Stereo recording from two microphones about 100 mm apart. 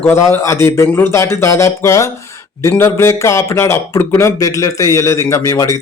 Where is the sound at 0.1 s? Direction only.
30° left (ahead or behind).